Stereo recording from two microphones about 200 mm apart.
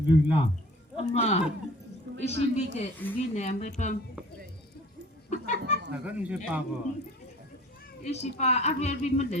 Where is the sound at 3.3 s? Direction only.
35° left (ahead or behind).